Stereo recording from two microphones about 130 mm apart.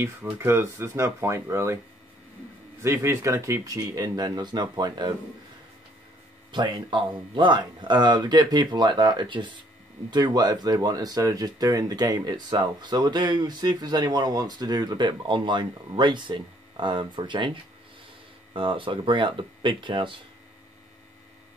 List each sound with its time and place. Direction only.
0.0 s speech: 20° right (ahead or behind)
2.8 s speech: 20° right (ahead or behind)
6.5 s speech: 35° right (ahead or behind)
18.5 s speech: 40° right (ahead or behind)